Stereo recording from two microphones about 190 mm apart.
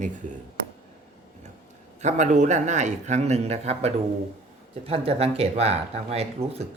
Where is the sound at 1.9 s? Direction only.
40° right (ahead or behind).